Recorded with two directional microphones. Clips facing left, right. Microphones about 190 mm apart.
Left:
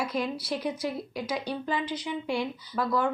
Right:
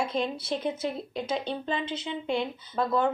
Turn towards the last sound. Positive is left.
turn(degrees=-25)  # may be behind; listen again after turning